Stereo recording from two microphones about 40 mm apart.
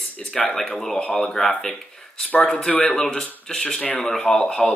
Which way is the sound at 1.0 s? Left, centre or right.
Left.